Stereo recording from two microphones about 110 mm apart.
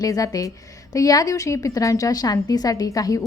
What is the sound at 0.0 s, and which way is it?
A woman's voice, 35° left (ahead or behind).